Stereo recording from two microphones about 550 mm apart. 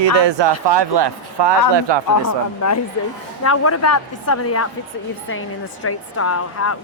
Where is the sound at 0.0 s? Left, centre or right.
Right.